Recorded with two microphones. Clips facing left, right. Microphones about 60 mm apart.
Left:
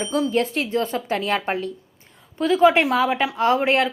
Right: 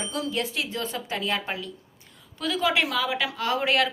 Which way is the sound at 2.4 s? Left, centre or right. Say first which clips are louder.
Left 9 dB; left.